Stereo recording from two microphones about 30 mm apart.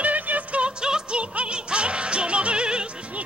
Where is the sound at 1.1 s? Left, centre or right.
Right.